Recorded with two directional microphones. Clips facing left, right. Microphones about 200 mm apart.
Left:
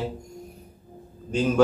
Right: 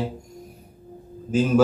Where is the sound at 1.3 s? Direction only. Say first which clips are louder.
Right 4 dB; 5° right (ahead or behind).